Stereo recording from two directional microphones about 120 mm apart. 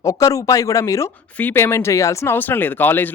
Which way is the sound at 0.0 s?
30° left (ahead or behind).